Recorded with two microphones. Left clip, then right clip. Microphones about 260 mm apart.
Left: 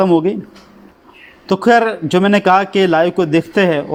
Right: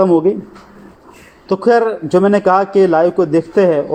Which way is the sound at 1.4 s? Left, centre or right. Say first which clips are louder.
Even; left.